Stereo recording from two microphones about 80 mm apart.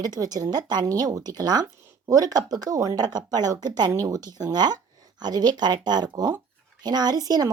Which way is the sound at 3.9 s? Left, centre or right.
Right.